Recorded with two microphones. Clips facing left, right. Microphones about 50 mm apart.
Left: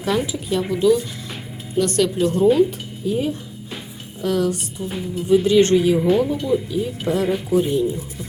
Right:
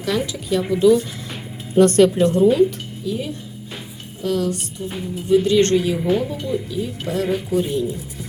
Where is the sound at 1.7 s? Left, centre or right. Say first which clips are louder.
Right 6 dB; right.